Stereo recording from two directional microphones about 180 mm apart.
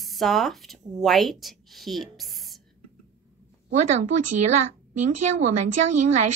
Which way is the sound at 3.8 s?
40° right (ahead or behind).